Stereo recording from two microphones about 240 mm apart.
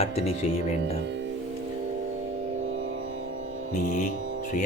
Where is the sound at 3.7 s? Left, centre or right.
Left.